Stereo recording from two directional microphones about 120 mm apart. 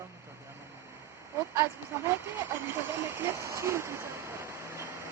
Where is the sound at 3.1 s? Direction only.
20° right (ahead or behind).